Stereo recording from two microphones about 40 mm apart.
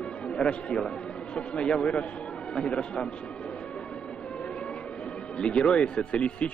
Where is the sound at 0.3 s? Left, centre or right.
Left.